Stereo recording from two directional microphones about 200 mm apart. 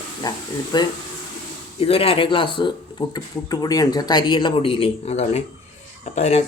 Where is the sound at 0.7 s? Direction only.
20° left (ahead or behind).